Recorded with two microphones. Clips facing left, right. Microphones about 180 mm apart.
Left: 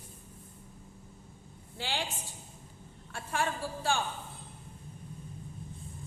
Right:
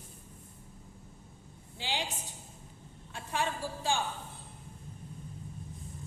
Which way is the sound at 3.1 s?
20° right (ahead or behind).